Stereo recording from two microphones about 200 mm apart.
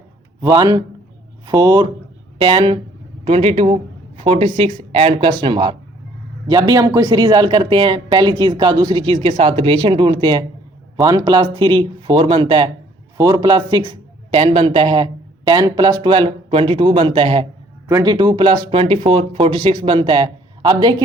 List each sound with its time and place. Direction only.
0.4 s speech: 20° right (ahead or behind)